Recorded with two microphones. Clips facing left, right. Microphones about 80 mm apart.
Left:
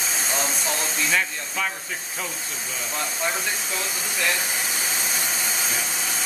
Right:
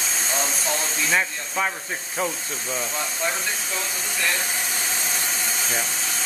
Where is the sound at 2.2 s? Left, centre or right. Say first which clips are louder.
Right 8 dB; right.